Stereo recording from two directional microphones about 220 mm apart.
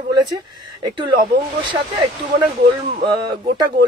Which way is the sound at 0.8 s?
20° right (ahead or behind).